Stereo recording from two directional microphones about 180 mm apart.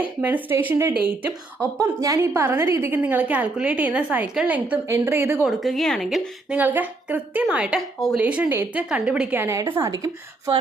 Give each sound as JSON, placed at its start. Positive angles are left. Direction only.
{"t": 0.0, "sound": "a woman's voice", "side_deg": -10}
{"t": 5.5, "sound": "a woman's voice", "side_deg": 0}